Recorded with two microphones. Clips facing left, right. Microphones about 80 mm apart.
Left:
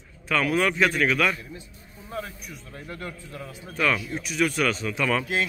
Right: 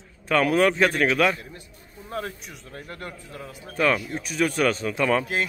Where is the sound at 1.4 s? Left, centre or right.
Right.